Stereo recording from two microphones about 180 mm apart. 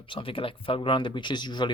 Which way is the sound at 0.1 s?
30° left (ahead or behind).